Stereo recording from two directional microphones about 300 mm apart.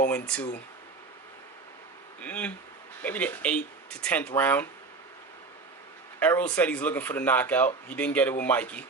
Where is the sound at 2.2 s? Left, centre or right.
Centre.